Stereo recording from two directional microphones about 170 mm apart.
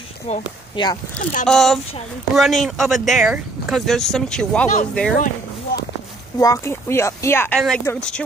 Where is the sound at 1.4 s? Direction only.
Centre (ahead or behind).